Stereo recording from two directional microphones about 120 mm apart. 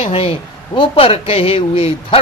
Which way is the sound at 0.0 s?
55° left (ahead or behind).